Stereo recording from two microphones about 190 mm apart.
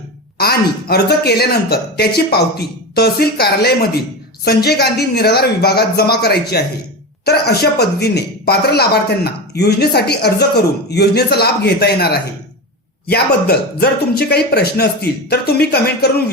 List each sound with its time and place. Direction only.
0.3 s speech: 55° left (ahead or behind)